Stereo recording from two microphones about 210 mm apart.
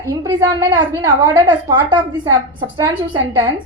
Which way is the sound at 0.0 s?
15° right (ahead or behind).